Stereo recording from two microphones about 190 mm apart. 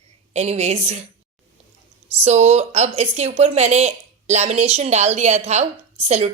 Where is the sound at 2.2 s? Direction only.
35° right (ahead or behind).